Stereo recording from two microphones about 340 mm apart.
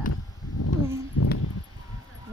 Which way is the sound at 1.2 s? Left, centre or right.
Left.